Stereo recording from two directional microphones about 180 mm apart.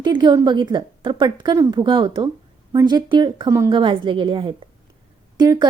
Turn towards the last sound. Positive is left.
turn(degrees=-25)  # may be behind; listen again after turning